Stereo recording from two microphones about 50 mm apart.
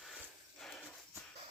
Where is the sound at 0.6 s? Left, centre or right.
Centre.